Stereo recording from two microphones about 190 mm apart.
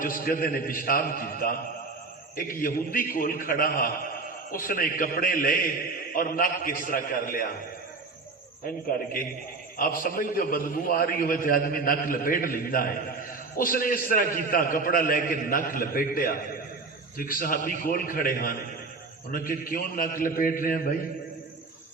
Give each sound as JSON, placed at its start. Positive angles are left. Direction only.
{"t": 0.0, "sound": "a man's voice", "side_deg": 50}
{"t": 8.6, "sound": "a man's voice", "side_deg": 50}